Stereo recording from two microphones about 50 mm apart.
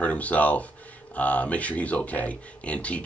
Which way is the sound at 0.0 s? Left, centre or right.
Left.